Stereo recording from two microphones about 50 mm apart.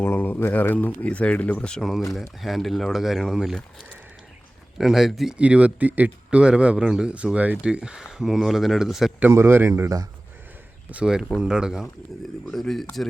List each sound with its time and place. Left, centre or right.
0.0 s speech: left
1.8 s speech: centre
4.8 s speech: centre
5.3 s speech: right
7.1 s speech: right; by 9.1 s centre
9.4 s speech: right
11.0 s speech: centre
12.5 s speech: centre